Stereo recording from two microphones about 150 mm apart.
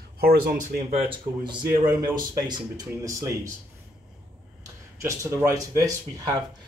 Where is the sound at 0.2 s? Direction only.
80° right; by 0.9 s 55° right (ahead or behind).